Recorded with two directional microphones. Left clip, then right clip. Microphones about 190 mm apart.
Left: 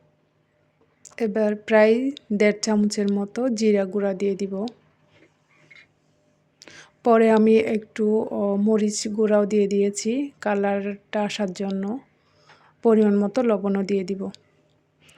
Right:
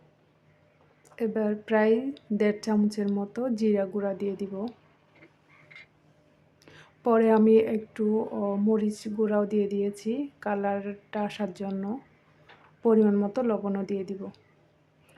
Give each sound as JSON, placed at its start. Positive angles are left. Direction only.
{"t": 1.0, "sound": "speech", "side_deg": 20}
{"t": 6.6, "sound": "speech", "side_deg": 20}